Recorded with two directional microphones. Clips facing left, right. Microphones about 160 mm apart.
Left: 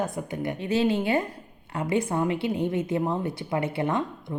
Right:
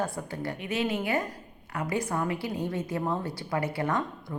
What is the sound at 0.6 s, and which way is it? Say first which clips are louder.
A woman's voice: left 6 dB; 30° left (ahead or behind).